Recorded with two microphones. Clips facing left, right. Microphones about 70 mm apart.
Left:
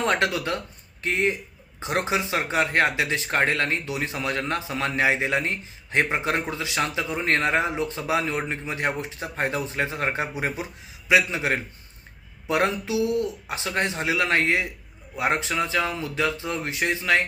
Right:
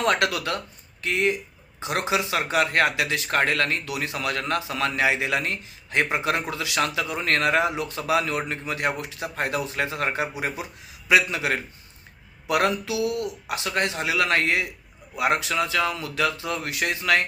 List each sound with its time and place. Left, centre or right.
0.0 s a man's voice: left